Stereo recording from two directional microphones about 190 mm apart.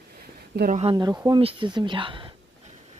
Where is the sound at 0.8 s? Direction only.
25° right (ahead or behind).